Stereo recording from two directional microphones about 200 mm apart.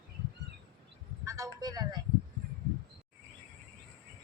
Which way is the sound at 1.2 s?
15° right (ahead or behind).